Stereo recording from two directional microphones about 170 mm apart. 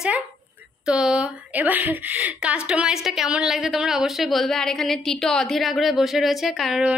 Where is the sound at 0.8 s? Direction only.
5° right (ahead or behind).